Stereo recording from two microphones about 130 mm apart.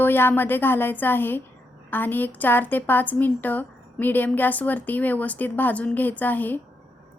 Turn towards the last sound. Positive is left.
turn(degrees=15)  # may be behind; listen again after turning